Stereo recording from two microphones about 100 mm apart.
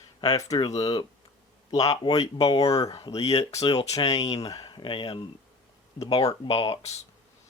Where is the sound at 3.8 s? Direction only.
70° left (ahead or behind).